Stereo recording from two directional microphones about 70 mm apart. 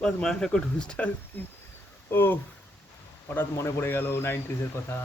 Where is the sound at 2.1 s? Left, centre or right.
Left.